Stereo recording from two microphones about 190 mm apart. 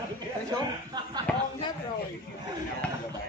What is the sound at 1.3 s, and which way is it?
Speech, 5° left (ahead or behind).